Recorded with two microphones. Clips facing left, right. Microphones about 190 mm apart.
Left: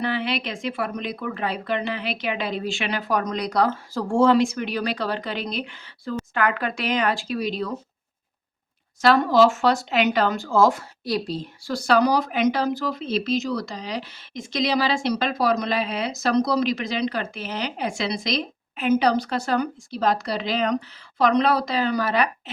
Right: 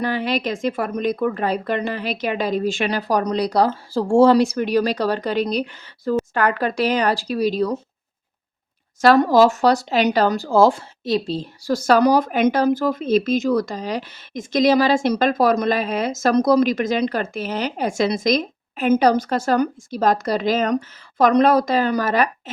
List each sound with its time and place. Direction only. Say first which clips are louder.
0.0 s speech: right 4 dB; 40° right (ahead or behind)
9.0 s speech: right 4 dB; 45° right (ahead or behind); by 11.4 s 25° right (ahead or behind)
11.6 s speech: right 4 dB; 45° right (ahead or behind)